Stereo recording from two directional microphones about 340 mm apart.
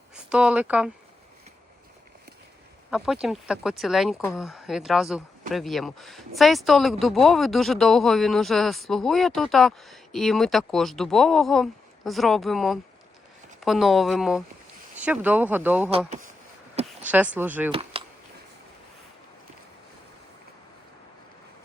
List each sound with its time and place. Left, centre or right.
0.1 s speech: centre
2.9 s speech: centre
16.0 s speech: right
17.0 s speech: centre
17.7 s speech: centre